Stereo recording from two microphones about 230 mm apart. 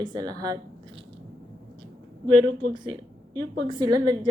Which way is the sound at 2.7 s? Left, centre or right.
Centre.